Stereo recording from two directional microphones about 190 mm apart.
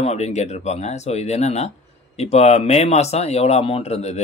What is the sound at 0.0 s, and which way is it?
Speech, 35° left (ahead or behind).